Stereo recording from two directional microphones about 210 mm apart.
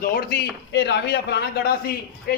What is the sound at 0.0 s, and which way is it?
A man's voice, 45° left (ahead or behind).